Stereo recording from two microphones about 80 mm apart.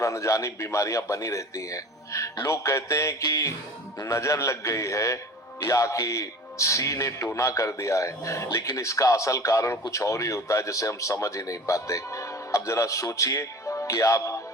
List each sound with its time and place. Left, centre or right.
0.0 s speech: left